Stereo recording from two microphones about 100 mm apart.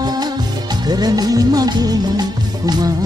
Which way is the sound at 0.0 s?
40° right (ahead or behind).